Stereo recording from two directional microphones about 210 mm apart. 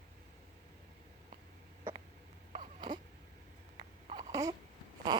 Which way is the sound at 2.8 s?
20° right (ahead or behind).